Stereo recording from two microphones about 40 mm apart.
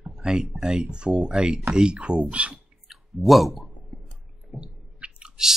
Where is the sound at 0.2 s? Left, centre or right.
Right.